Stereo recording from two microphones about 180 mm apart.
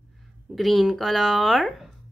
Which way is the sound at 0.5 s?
Centre (ahead or behind).